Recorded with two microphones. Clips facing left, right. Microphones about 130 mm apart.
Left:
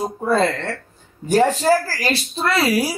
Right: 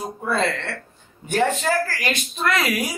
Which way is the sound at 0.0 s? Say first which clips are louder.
Left 5 dB; 35° left (ahead or behind).